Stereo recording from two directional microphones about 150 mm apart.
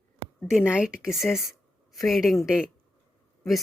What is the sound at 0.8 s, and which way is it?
Speech, 5° right (ahead or behind).